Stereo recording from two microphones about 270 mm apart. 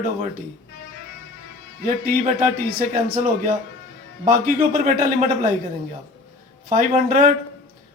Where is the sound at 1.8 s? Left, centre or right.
Right.